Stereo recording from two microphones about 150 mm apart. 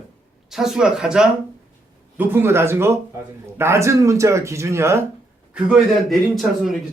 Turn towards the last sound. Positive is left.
turn(degrees=0)  # may be behind; listen again after turning